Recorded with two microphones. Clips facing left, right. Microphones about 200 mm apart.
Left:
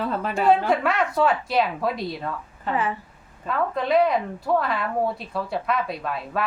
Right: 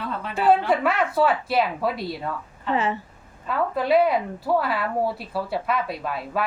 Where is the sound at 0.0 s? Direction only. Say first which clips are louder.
Left 5 dB; 45° left (ahead or behind).